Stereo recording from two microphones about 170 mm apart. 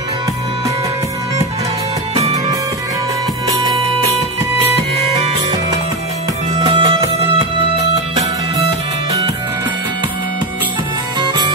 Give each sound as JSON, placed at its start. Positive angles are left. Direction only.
{"t": 6.5, "sound": "music", "side_deg": -25}
{"t": 11.1, "sound": "music", "side_deg": -25}